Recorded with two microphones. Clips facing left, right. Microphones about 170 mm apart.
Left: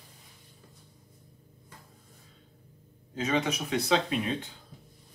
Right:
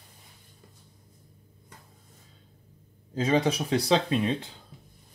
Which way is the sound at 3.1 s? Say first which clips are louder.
Right 5 dB; 35° right (ahead or behind).